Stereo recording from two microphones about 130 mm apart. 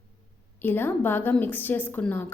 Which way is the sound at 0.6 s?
15° left (ahead or behind).